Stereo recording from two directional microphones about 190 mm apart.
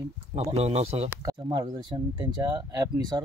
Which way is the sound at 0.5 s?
35° right (ahead or behind).